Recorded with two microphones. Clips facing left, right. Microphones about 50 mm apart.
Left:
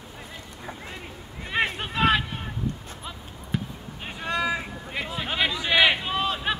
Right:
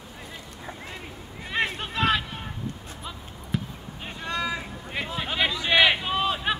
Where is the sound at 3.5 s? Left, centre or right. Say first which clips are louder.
Even; centre.